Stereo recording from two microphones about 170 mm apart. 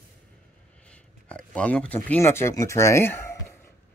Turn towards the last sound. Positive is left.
turn(degrees=15)  # may be behind; listen again after turning